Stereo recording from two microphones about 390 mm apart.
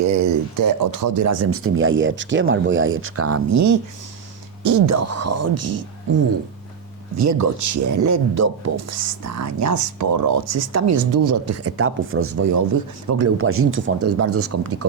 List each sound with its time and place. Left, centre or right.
0.0 s speech: right
7.2 s speech: right